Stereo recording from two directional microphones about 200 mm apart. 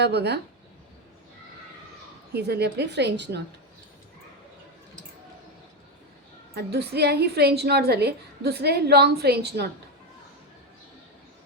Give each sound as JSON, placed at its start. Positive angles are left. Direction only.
{"t": 0.0, "sound": "a woman's voice", "side_deg": -55}
{"t": 2.3, "sound": "a woman's voice", "side_deg": -55}
{"t": 6.5, "sound": "a woman's voice", "side_deg": -55}